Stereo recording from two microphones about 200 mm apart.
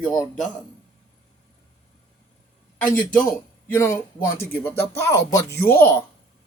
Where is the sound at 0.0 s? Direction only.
15° left (ahead or behind).